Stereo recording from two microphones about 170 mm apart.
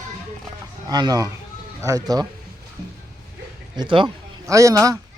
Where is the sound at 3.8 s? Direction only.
30° right (ahead or behind).